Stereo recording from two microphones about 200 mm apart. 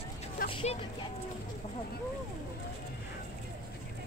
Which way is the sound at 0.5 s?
25° left (ahead or behind).